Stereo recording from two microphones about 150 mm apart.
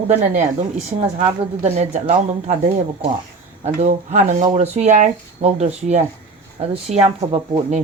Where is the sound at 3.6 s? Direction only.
55° right (ahead or behind).